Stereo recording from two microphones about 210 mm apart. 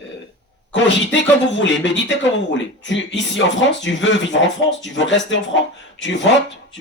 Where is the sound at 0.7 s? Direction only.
60° left (ahead or behind).